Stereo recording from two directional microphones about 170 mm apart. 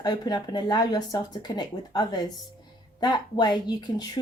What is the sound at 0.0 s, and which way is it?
A woman's voice, 25° left (ahead or behind).